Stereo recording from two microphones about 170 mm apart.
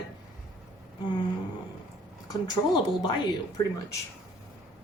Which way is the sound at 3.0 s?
25° left (ahead or behind).